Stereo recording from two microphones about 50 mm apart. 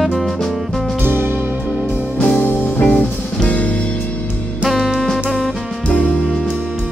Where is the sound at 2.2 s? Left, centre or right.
Left.